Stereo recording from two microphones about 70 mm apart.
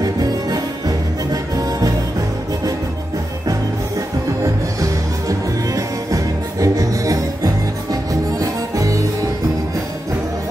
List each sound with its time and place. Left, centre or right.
0.0 s music: right
5.8 s music: right